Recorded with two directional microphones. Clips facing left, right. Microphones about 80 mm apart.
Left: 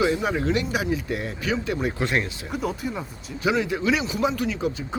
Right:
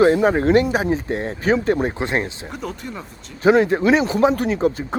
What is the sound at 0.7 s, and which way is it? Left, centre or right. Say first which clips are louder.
Speech: right 5 dB; right.